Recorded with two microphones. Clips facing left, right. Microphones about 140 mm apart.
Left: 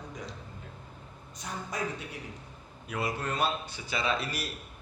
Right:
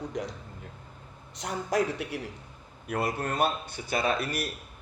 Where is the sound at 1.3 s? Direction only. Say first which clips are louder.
Right 9 dB; 80° right.